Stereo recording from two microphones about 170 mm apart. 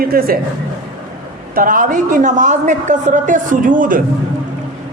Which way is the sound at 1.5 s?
55° right (ahead or behind).